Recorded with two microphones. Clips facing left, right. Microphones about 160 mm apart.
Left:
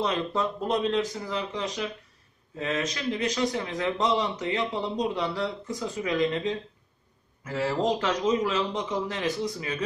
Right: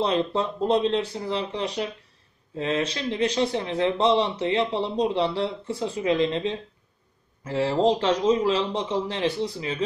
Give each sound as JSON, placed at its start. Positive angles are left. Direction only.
{"t": 0.0, "sound": "speech", "side_deg": -30}